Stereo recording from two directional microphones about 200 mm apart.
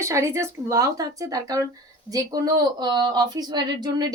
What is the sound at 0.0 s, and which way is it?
A woman's voice, 15° right (ahead or behind).